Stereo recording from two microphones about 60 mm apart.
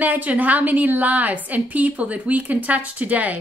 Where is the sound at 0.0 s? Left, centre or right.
Right.